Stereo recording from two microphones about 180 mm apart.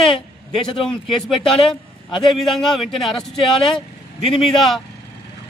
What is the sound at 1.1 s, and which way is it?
Speech, centre (ahead or behind).